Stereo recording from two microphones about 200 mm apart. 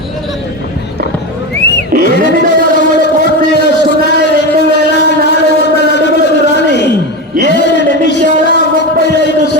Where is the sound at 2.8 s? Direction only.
60° left (ahead or behind).